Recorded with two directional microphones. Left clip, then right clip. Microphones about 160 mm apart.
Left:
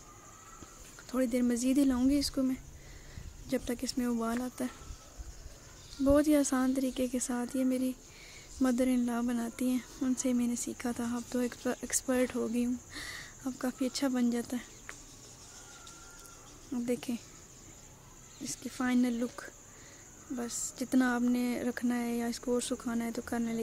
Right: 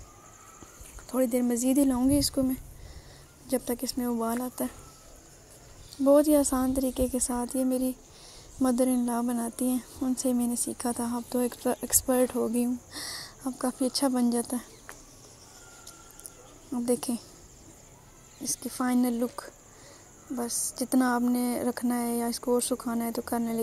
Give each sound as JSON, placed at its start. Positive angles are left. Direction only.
{"t": 1.0, "sound": "speech", "side_deg": 0}
{"t": 6.0, "sound": "speech", "side_deg": 0}
{"t": 12.9, "sound": "a sound", "side_deg": 15}
{"t": 13.6, "sound": "speech", "side_deg": -10}
{"t": 16.8, "sound": "speech", "side_deg": -15}
{"t": 18.8, "sound": "speech", "side_deg": 0}
{"t": 20.7, "sound": "speech", "side_deg": -5}
{"t": 22.8, "sound": "speech", "side_deg": 10}
{"t": 23.3, "sound": "speech", "side_deg": -5}